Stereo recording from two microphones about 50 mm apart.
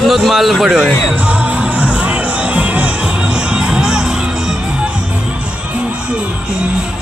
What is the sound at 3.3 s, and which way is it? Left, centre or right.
Music, centre.